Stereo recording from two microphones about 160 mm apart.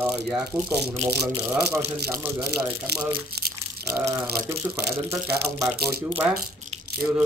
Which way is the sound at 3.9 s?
15° right (ahead or behind).